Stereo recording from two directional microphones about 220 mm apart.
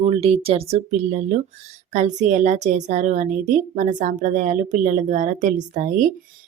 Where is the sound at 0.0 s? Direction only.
30° right (ahead or behind).